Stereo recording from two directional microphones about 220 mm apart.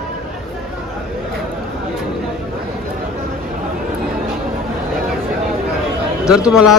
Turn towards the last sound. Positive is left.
turn(degrees=0)  # may be behind; listen again after turning